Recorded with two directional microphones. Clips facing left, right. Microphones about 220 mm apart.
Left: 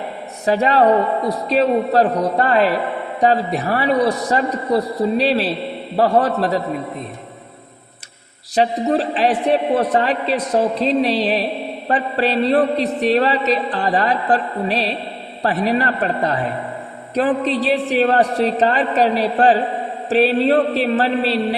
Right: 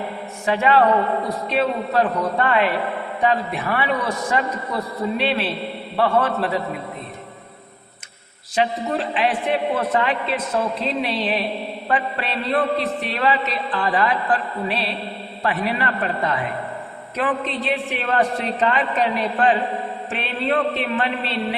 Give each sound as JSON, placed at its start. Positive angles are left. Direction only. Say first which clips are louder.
{"t": 0.4, "sound": "a man's voice", "louder": "left 3 dB", "side_deg": 35}
{"t": 8.5, "sound": "a man's voice", "louder": "left 5 dB", "side_deg": 35}